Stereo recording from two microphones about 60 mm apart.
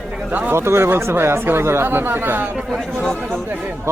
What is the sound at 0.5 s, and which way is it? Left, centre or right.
Speech, right.